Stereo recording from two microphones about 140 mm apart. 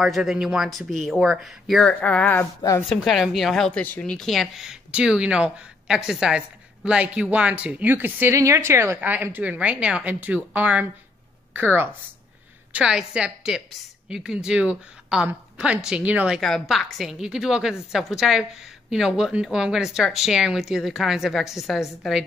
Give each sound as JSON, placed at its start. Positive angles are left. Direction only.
{"t": 0.0, "sound": "a woman's voice", "side_deg": 0}
{"t": 2.8, "sound": "a woman's voice", "side_deg": 0}
{"t": 16.3, "sound": "a woman's voice", "side_deg": 0}